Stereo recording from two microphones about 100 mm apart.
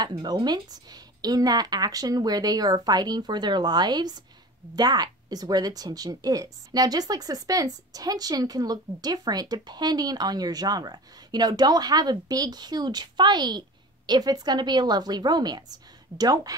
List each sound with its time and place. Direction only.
0.0 s a woman's voice: 45° right (ahead or behind)